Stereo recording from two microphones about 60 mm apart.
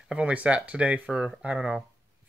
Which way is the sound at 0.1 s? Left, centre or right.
Centre.